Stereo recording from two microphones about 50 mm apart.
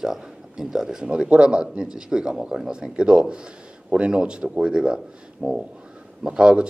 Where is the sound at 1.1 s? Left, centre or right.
Right.